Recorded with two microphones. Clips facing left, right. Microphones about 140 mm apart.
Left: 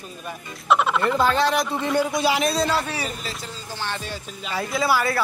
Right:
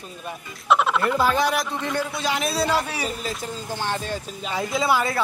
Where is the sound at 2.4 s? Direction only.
5° right (ahead or behind).